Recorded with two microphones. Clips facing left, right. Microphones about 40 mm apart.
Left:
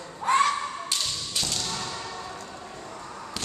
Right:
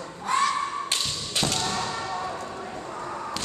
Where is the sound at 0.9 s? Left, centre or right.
Right.